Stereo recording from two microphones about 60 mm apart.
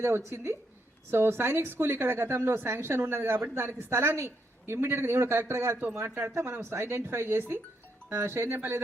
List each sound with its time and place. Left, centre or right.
1.1 s a woman's voice: right